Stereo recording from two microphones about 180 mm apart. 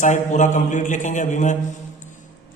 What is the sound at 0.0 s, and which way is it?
A man's voice, 45° left (ahead or behind).